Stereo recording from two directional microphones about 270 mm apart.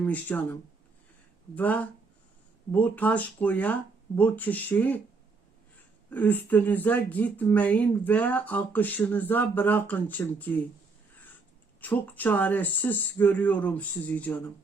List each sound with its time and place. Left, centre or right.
0.0 s speech: centre
1.5 s speech: centre
6.1 s speech: centre
11.8 s speech: centre